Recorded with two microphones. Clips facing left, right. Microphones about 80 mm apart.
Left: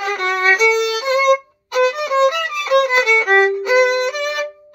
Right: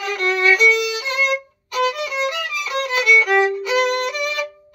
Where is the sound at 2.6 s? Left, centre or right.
Left.